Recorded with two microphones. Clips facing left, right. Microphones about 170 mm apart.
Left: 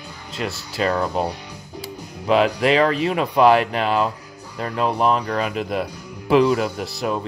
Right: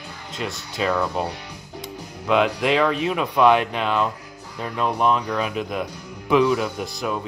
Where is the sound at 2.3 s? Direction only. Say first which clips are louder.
Left 2 dB; centre (ahead or behind).